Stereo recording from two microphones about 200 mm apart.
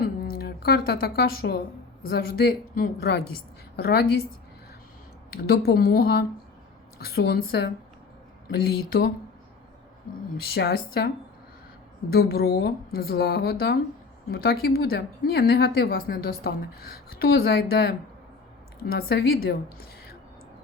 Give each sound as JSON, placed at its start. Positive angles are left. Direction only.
{"t": 0.2, "sound": "a woman's voice", "side_deg": 50}
{"t": 5.5, "sound": "a woman's voice", "side_deg": 50}
{"t": 10.3, "sound": "a woman's voice", "side_deg": 50}
{"t": 12.1, "sound": "a woman's voice", "side_deg": 50}